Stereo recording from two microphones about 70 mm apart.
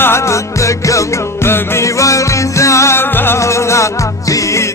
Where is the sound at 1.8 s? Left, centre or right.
Left.